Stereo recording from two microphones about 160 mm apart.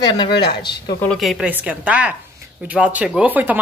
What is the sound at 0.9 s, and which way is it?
A woman's voice, 5° left (ahead or behind).